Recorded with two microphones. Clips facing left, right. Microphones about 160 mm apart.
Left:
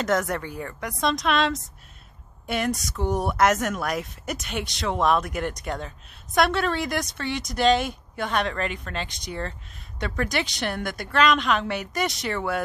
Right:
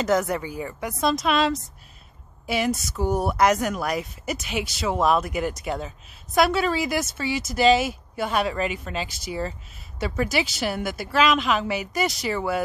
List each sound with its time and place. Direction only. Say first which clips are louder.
0.0 s speech: right 2 dB; centre (ahead or behind)